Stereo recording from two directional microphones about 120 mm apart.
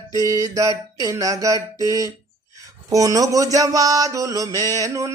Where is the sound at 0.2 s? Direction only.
25° right (ahead or behind).